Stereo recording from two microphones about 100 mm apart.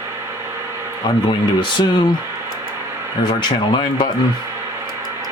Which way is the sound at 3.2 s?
55° left (ahead or behind).